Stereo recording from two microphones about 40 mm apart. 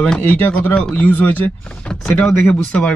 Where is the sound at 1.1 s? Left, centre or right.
Left.